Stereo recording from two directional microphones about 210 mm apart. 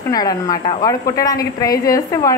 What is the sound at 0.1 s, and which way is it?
A woman's voice, 20° left (ahead or behind).